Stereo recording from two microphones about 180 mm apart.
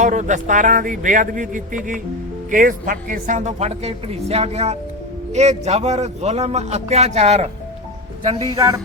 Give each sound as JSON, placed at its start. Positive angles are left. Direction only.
{"t": 0.0, "sound": "a man's voice", "side_deg": -45}
{"t": 8.5, "sound": "speech", "side_deg": -15}